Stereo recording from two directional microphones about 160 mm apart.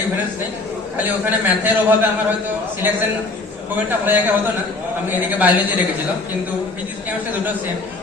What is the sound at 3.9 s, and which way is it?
A woman's voice, 10° right (ahead or behind).